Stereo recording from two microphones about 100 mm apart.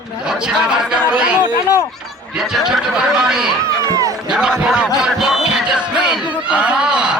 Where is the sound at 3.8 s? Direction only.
35° right (ahead or behind).